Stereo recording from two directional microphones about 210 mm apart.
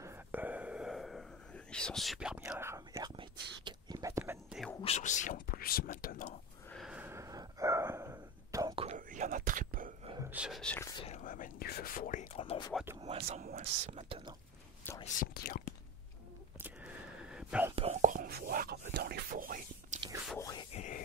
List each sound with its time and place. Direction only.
0.0 s whispering: 10° right (ahead or behind)
4.8 s speech: 35° left (ahead or behind)
6.7 s a sound: centre (ahead or behind)
8.8 s whispering: 35° right (ahead or behind)
10.0 s whispering: 15° right (ahead or behind)
10.3 s speech: 5° right (ahead or behind)
11.0 s speech: 35° left (ahead or behind)
13.0 s speech: 35° right (ahead or behind)
15.1 s speech: 45° left (ahead or behind)
16.6 s whispering: 5° right (ahead or behind)
17.7 s whispering: 35° right (ahead or behind)
20.3 s a sound: 15° left (ahead or behind)
20.7 s a sound: 35° left (ahead or behind)